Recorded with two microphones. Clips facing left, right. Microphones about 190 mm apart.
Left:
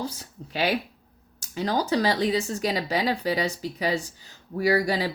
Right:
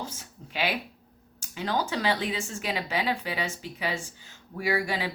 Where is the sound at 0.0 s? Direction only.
35° left (ahead or behind).